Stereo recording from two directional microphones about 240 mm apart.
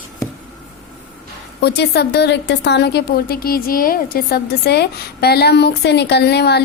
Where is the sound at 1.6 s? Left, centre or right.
Left.